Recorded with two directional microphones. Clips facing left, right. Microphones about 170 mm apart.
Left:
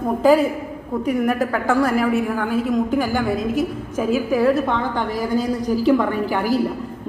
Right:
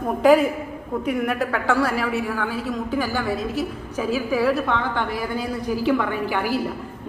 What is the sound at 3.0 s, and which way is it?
Speech, 15° left (ahead or behind).